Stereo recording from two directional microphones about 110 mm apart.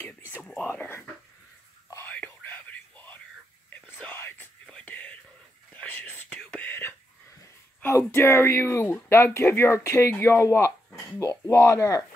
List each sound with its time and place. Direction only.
0.0 s whispering: 20° left (ahead or behind)
0.7 s a sound: 20° left (ahead or behind)
2.0 s whispering: 15° left (ahead or behind)
7.8 s speech: 25° left (ahead or behind)